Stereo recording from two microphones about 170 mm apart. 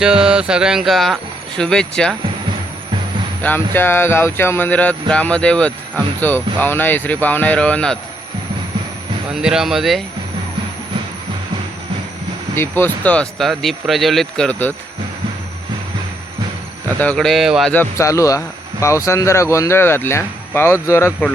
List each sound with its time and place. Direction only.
0.0 s speech: 5° right (ahead or behind)
3.4 s speech: 10° left (ahead or behind)
9.3 s speech: 5° right (ahead or behind)
12.5 s speech: 10° left (ahead or behind)
17.0 s speech: 5° left (ahead or behind)
17.7 s speech: 15° left (ahead or behind)